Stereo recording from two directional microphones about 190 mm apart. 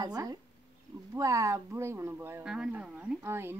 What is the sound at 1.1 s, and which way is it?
Speech, 15° right (ahead or behind).